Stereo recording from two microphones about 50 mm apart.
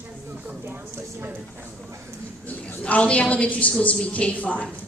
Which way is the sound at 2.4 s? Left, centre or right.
Left.